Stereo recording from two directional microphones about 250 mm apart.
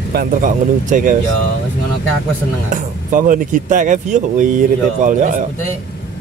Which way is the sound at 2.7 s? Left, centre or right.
Right.